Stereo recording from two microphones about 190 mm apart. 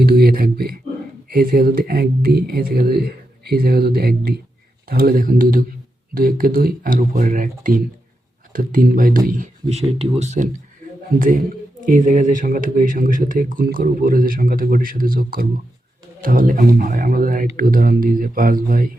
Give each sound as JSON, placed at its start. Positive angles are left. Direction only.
{"t": 0.0, "sound": "speech", "side_deg": -55}
{"t": 11.8, "sound": "speech", "side_deg": -45}